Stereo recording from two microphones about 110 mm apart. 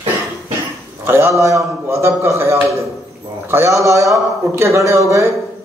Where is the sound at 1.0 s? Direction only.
25° right (ahead or behind).